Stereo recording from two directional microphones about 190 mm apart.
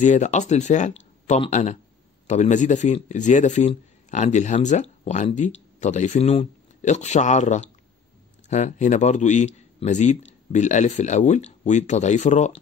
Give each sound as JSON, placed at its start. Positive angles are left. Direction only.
{"t": 0.0, "sound": "speech", "side_deg": 40}